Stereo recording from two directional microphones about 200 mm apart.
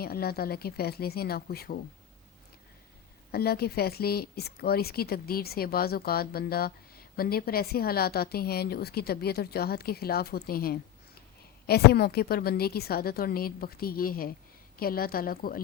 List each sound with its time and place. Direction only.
0.0 s speech: 50° left (ahead or behind)
3.3 s speech: 50° left (ahead or behind)